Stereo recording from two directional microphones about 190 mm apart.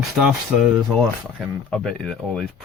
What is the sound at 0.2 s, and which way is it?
Speech, 5° right (ahead or behind).